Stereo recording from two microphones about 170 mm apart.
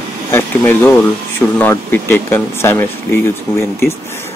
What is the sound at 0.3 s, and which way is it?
Speech, 15° left (ahead or behind).